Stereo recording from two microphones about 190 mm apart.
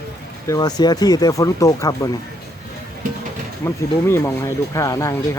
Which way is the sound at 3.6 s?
15° left (ahead or behind).